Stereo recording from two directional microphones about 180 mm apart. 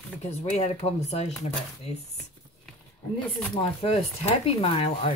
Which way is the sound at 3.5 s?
30° left (ahead or behind).